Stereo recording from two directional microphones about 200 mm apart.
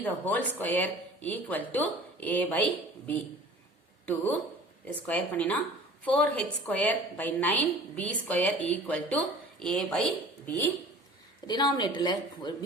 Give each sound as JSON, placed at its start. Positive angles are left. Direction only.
{"t": 0.0, "sound": "a woman's voice", "side_deg": 10}
{"t": 4.0, "sound": "a woman's voice", "side_deg": 10}
{"t": 11.4, "sound": "a woman's voice", "side_deg": 20}